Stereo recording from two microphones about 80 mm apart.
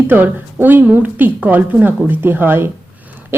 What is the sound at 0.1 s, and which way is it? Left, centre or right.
A woman's voice, right.